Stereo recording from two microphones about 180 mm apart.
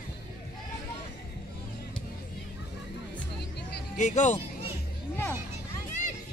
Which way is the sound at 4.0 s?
40° left (ahead or behind).